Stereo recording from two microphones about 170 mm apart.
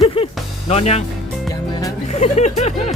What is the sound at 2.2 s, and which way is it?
Speech, 40° left (ahead or behind).